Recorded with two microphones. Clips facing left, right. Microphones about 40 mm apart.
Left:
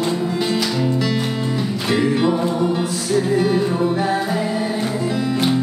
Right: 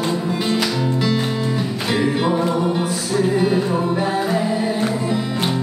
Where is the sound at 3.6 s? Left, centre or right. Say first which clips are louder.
Left 1 dB; centre.